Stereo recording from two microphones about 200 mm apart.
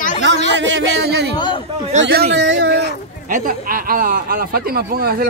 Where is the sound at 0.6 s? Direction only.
65° right (ahead or behind).